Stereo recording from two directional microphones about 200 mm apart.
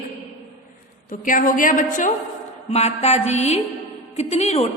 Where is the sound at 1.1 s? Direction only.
40° left (ahead or behind).